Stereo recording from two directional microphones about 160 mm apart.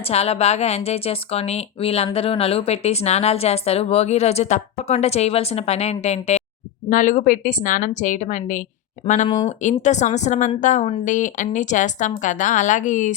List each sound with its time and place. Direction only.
0.0 s a woman's voice: 40° left (ahead or behind)